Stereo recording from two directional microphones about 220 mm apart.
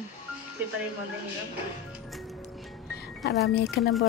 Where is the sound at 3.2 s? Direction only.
50° left (ahead or behind).